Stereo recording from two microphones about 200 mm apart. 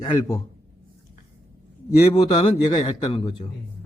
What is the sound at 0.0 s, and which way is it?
Speech, 10° left (ahead or behind).